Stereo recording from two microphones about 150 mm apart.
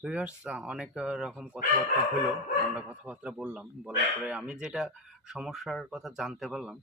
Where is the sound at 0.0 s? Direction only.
5° right (ahead or behind).